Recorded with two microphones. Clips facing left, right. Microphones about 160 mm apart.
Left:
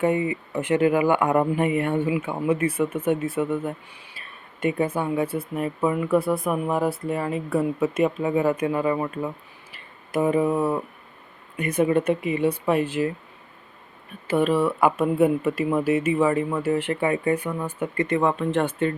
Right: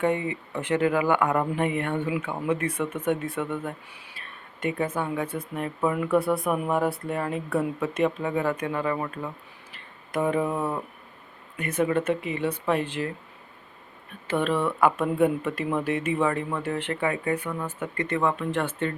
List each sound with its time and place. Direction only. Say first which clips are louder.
0.0 s speech: left 3 dB; 5° left (ahead or behind)
9.7 s a sound: left 4 dB; 5° left (ahead or behind)
11.5 s speech: left 4 dB; 15° left (ahead or behind)
14.3 s speech: left 4 dB; 10° left (ahead or behind)
18.3 s speech: left 4 dB; 25° left (ahead or behind)